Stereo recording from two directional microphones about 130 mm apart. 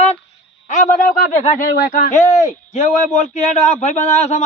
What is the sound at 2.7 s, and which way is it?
A man's voice, 65° left (ahead or behind).